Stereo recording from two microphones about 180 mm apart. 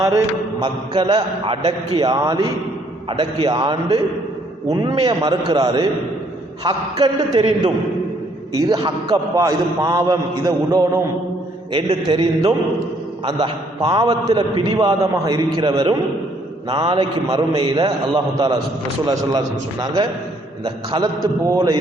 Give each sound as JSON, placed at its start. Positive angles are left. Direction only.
{"t": 0.6, "sound": "a man's voice", "side_deg": -25}
{"t": 8.5, "sound": "a man's voice", "side_deg": -20}